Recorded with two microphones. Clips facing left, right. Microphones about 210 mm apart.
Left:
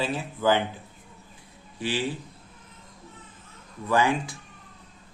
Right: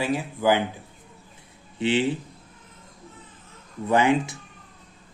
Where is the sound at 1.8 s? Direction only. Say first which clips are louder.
Right 6 dB; 25° right (ahead or behind).